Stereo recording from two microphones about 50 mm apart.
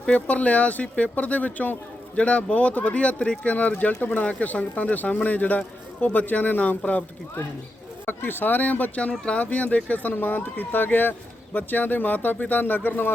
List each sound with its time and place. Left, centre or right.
0.1 s speech: left
8.0 s speech: left
9.0 s speech: left